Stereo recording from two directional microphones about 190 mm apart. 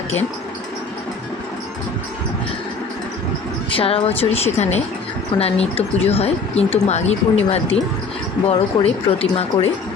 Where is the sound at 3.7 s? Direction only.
30° left (ahead or behind).